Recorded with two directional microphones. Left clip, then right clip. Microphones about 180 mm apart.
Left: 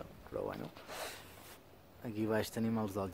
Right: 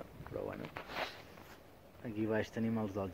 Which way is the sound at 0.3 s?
20° left (ahead or behind).